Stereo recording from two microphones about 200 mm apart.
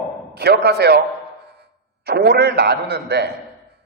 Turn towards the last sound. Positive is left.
turn(degrees=-55)  # may be behind; listen again after turning